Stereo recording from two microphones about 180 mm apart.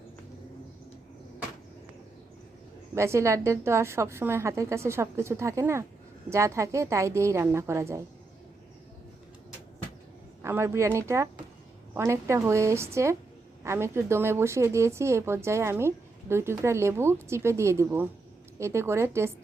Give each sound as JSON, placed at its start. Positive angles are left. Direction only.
{"t": 2.9, "sound": "a woman's voice", "side_deg": -15}
{"t": 10.4, "sound": "a woman's voice", "side_deg": -15}